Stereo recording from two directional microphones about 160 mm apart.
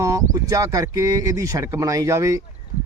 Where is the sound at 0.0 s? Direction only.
20° right (ahead or behind).